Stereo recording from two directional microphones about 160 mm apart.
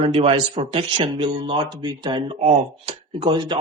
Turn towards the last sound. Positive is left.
turn(degrees=-30)  # may be behind; listen again after turning